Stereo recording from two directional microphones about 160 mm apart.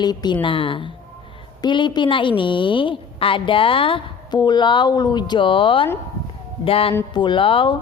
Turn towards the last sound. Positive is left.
turn(degrees=35)  # may be behind; listen again after turning